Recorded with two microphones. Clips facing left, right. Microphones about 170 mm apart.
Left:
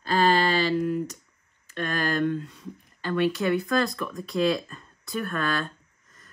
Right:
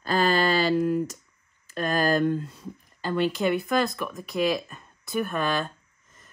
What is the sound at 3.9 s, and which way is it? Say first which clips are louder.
Speech: left 1 dB; 10° right (ahead or behind).